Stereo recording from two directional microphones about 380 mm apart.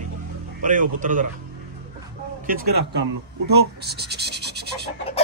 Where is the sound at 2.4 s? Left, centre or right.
Right.